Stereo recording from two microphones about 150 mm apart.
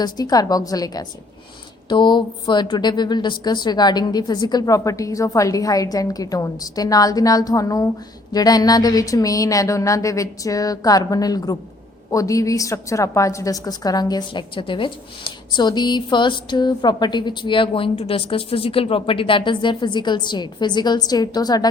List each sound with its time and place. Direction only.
0.0 s a woman's voice: 25° left (ahead or behind)